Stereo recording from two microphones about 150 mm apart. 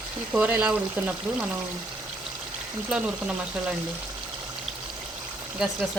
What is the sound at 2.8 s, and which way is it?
Speech, 5° right (ahead or behind).